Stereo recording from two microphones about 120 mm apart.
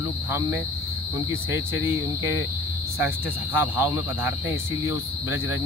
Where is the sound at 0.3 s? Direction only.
20° right (ahead or behind).